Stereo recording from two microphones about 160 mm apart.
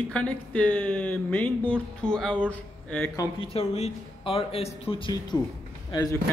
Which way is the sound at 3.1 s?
25° left (ahead or behind).